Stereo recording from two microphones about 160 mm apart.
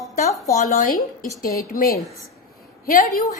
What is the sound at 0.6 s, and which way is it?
Speech, 55° left (ahead or behind).